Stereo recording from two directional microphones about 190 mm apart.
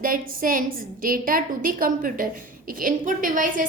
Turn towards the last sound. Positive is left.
turn(degrees=-45)  # may be behind; listen again after turning